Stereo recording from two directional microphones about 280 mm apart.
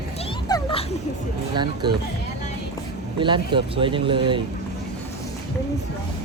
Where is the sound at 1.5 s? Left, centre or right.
Centre.